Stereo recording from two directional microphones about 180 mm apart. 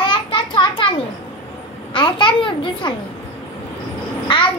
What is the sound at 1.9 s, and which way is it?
A child's voice, 30° left (ahead or behind).